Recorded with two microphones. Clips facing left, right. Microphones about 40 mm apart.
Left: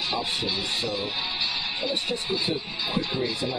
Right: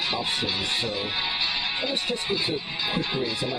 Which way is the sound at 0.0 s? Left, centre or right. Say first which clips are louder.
Right 1 dB; right.